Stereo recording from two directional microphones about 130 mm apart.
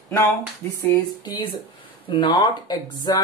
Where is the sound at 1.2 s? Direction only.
35° left (ahead or behind).